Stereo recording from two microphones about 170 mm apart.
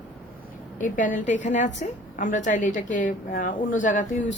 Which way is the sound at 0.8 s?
50° left (ahead or behind).